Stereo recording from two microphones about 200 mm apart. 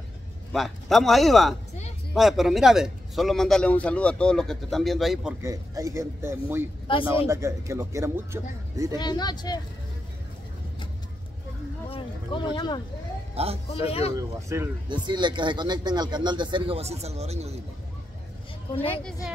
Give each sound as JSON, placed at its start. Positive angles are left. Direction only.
{"t": 0.5, "sound": "a man's voice", "side_deg": 0}
{"t": 5.4, "sound": "speech", "side_deg": -15}
{"t": 6.9, "sound": "speech", "side_deg": 25}
{"t": 7.2, "sound": "speech", "side_deg": -15}
{"t": 8.9, "sound": "speech", "side_deg": 20}
{"t": 11.9, "sound": "a sound", "side_deg": 25}
{"t": 13.3, "sound": "a man's voice", "side_deg": -30}
{"t": 13.8, "sound": "speech", "side_deg": 30}
{"t": 14.5, "sound": "speech", "side_deg": -20}